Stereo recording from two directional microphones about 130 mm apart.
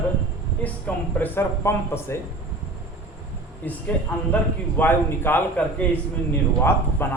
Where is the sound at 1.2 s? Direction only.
20° left (ahead or behind).